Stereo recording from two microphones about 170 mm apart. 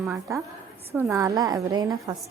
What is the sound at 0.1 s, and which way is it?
A woman's voice, 15° right (ahead or behind).